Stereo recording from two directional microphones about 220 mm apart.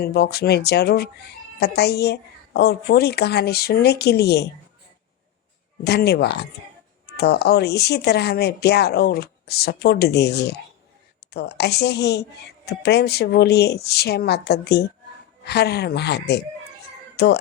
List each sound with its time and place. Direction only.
0.0 s speech: 45° left (ahead or behind)
5.8 s speech: 45° left (ahead or behind)